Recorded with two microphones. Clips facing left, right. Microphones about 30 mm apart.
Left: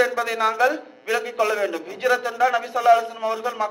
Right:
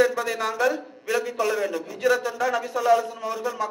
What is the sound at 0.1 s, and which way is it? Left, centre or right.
A man's voice, centre.